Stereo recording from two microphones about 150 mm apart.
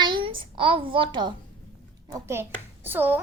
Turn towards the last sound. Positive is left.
turn(degrees=-10)  # may be behind; listen again after turning